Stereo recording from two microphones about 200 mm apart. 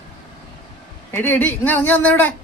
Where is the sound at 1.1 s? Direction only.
10° left (ahead or behind).